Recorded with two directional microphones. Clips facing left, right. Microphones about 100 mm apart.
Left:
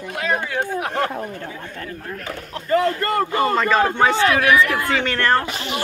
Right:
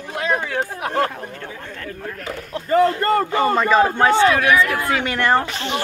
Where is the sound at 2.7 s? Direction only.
30° right (ahead or behind).